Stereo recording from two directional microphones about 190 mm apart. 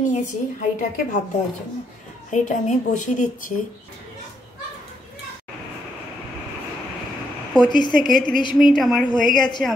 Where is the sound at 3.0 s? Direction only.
40° left (ahead or behind).